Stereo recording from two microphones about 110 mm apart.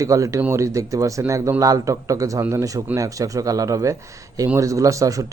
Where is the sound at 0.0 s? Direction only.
30° right (ahead or behind).